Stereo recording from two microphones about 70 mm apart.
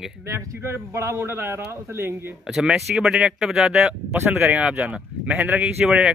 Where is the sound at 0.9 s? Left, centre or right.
Right.